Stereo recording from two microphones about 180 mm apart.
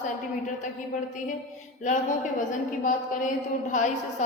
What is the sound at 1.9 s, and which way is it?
A woman's voice, 45° left (ahead or behind).